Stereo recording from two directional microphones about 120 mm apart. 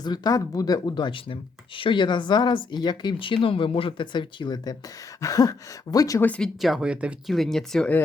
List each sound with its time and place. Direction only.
0.0 s speech: 35° left (ahead or behind)
6.2 s speech: 10° left (ahead or behind)
6.6 s speech: 5° right (ahead or behind)
7.3 s speech: 5° left (ahead or behind)